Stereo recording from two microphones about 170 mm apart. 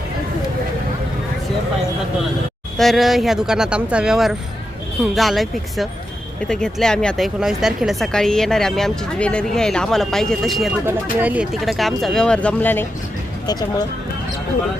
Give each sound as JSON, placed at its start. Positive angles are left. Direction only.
{"t": 2.7, "sound": "speech", "side_deg": 0}
{"t": 13.5, "sound": "speech", "side_deg": 25}